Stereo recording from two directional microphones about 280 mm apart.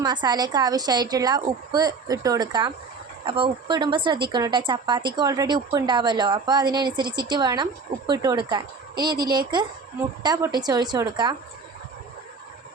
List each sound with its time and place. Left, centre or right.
0.0 s speech: centre